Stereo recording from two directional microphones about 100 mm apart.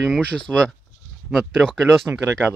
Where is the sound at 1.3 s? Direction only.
Centre (ahead or behind).